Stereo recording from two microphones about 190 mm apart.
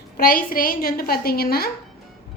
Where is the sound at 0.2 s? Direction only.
50° left (ahead or behind).